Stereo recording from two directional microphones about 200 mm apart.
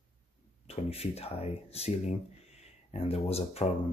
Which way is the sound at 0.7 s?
30° left (ahead or behind).